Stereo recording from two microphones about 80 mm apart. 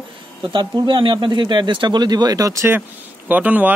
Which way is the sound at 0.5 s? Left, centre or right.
Right.